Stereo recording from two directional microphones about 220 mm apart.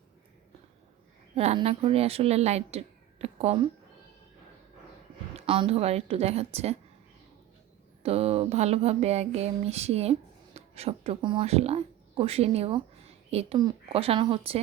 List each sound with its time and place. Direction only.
1.4 s speech: 30° right (ahead or behind)
5.4 s speech: 25° right (ahead or behind)
8.0 s speech: 25° right (ahead or behind)